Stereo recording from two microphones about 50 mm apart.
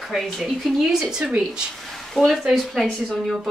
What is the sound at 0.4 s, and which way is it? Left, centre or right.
Speech, centre.